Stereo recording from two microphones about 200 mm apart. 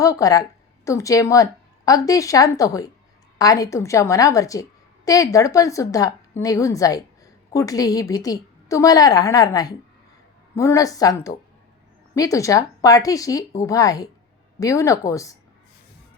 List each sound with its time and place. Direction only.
0.0 s a woman's voice: 15° left (ahead or behind)